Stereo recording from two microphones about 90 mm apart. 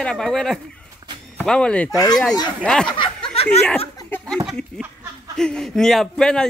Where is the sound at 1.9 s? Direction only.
45° left (ahead or behind).